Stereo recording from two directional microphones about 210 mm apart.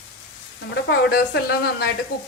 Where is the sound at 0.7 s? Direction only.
55° left (ahead or behind).